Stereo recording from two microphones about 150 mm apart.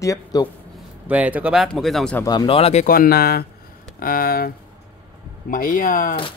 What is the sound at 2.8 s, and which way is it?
Speech, 75° left (ahead or behind).